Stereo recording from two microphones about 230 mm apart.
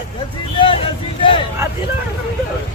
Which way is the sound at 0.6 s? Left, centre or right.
Left.